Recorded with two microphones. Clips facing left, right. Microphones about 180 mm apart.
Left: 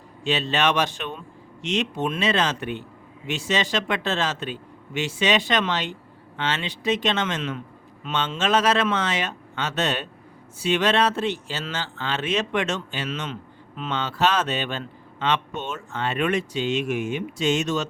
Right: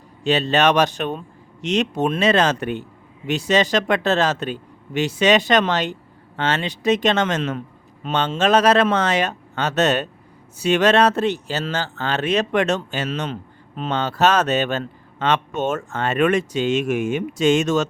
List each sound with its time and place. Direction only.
0.3 s speech: 40° right (ahead or behind)